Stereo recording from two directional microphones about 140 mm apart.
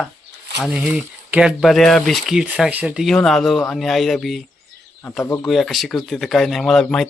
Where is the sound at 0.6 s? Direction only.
5° right (ahead or behind).